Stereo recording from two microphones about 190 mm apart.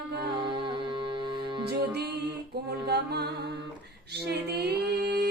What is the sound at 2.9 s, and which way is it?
Music, 60° right (ahead or behind).